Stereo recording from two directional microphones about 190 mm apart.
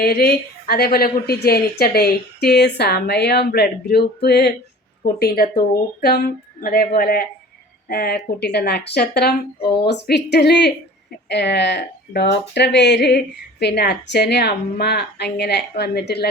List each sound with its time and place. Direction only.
0.0 s speech: 55° left (ahead or behind)